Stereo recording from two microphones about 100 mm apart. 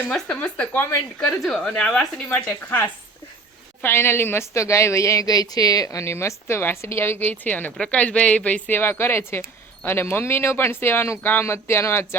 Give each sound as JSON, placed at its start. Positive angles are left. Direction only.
{"t": 0.1, "sound": "speech", "side_deg": 15}
{"t": 1.4, "sound": "speech", "side_deg": 5}
{"t": 3.8, "sound": "a woman's voice", "side_deg": 25}